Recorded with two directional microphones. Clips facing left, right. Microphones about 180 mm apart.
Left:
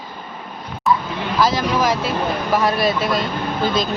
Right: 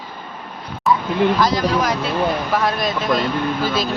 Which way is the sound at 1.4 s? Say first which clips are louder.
Even; centre (ahead or behind).